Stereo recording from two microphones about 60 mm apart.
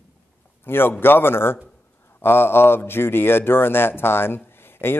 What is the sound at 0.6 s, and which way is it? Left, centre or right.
A man's voice, left.